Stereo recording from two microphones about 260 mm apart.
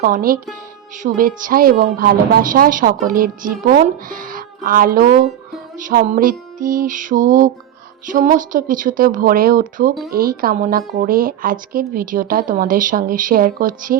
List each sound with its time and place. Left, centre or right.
0.0 s a woman's voice: right